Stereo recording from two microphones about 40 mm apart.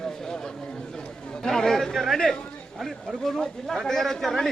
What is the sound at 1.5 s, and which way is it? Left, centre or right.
Chatter, centre.